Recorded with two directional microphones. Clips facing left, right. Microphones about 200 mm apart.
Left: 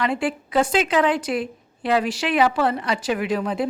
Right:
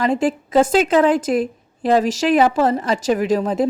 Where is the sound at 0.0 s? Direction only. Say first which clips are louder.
Right 5 dB; 40° right (ahead or behind).